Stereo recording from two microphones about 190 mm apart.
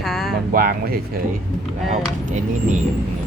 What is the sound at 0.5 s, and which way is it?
Speech, 50° right (ahead or behind).